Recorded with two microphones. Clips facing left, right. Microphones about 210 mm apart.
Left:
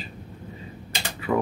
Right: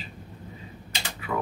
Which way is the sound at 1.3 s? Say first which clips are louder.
Left 6 dB; 30° left (ahead or behind).